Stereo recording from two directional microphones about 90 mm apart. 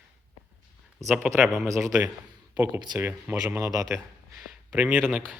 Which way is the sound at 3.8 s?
5° right (ahead or behind).